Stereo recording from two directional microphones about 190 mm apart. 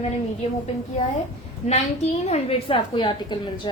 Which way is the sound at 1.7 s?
35° left (ahead or behind).